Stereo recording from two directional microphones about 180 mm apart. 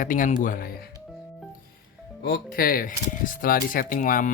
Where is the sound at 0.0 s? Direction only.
45° left (ahead or behind).